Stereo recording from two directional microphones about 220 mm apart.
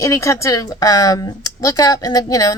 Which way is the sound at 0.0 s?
15° left (ahead or behind).